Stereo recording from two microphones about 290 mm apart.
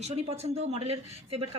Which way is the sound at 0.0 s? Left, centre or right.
Right.